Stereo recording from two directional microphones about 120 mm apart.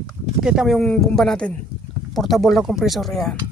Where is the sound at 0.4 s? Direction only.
5° right (ahead or behind).